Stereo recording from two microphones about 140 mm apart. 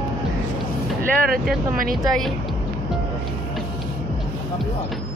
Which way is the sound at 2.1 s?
Centre (ahead or behind).